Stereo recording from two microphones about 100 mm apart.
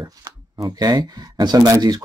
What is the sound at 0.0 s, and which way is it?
Speech, 35° right (ahead or behind).